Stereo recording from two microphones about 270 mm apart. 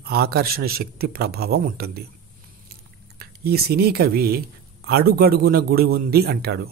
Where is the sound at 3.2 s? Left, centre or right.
Right.